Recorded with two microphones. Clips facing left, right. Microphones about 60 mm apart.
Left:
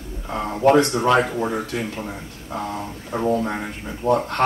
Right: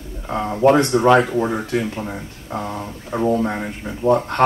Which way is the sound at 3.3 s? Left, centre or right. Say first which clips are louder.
Right 1 dB; right.